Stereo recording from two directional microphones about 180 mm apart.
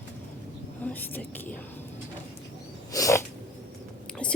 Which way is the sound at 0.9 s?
10° left (ahead or behind).